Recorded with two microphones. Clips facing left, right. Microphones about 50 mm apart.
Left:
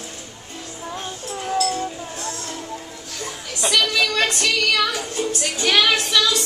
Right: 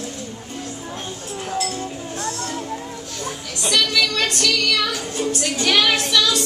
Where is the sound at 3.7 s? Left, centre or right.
Centre.